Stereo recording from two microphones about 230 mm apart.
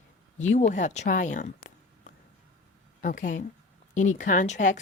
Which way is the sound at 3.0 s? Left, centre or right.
Left.